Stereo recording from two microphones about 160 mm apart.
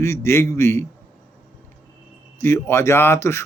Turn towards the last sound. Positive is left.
turn(degrees=15)  # may be behind; listen again after turning